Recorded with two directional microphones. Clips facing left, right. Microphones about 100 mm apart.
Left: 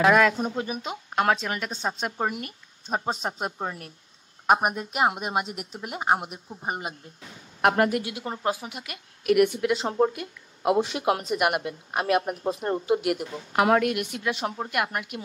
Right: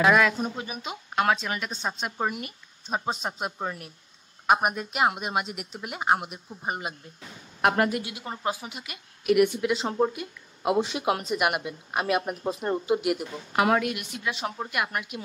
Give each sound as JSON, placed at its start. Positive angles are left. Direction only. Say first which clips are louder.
{"t": 0.0, "sound": "a woman's voice", "louder": "left 2 dB", "side_deg": 45}
{"t": 4.6, "sound": "a woman's voice", "louder": "left 1 dB", "side_deg": 40}
{"t": 9.8, "sound": "a woman's voice", "louder": "left 2 dB", "side_deg": 45}